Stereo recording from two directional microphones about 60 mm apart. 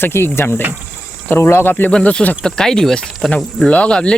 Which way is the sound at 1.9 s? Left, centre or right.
Centre.